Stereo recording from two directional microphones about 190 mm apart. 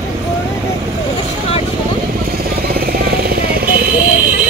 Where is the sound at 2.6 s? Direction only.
50° right (ahead or behind).